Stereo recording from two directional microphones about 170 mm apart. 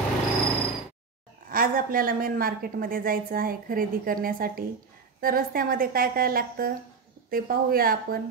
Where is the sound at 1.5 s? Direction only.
55° right (ahead or behind).